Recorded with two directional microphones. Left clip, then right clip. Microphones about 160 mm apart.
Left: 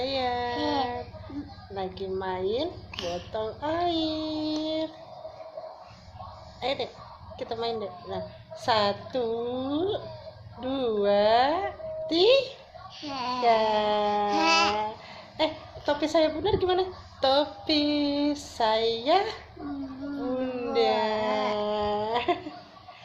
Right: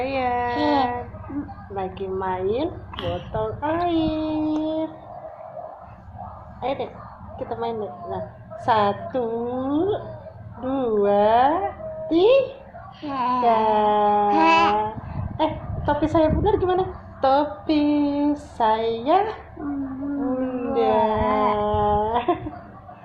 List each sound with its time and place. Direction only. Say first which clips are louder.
0.0 s a sound: right 5 dB; 25° left (ahead or behind)
0.5 s a sound: right 7 dB; centre (ahead or behind)
1.7 s a woman's voice: right 4 dB; 20° left (ahead or behind)
3.3 s a woman's voice: right 5 dB; 30° left (ahead or behind)
6.6 s a woman's voice: right 3 dB; 25° left (ahead or behind)
13.0 s a woman's voice: right 7 dB; 10° left (ahead or behind)
14.3 s music: right 5 dB; 10° left (ahead or behind)
15.9 s a woman's voice: right 4 dB; 25° left (ahead or behind)
20.4 s a sound: right 2 dB; 25° left (ahead or behind)